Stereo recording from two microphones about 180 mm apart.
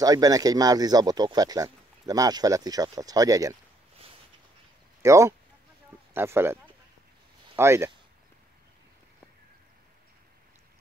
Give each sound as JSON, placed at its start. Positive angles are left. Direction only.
{"t": 0.0, "sound": "speech", "side_deg": -20}
{"t": 5.0, "sound": "speech", "side_deg": -15}